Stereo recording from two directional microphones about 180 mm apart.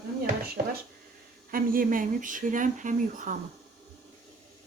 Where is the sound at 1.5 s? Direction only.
50° right (ahead or behind).